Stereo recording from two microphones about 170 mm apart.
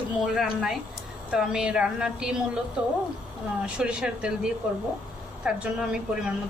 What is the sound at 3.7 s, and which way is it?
A woman's voice, 5° right (ahead or behind).